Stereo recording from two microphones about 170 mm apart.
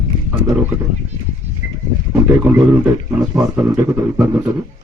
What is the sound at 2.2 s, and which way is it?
Speech, 5° right (ahead or behind).